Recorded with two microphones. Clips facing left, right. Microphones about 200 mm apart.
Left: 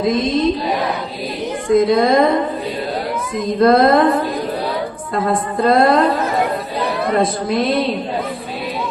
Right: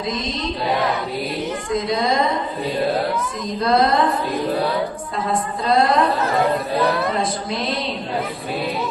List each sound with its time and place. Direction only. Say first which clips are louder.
0.0 s a woman's voice: left 9 dB; 55° left (ahead or behind)
1.7 s a woman's voice: left 9 dB; 55° left (ahead or behind)
3.4 s a woman's voice: left 7 dB; 55° left (ahead or behind)
5.2 s a woman's voice: left 6 dB; 55° left (ahead or behind)
7.2 s a woman's voice: left 7 dB; 55° left (ahead or behind)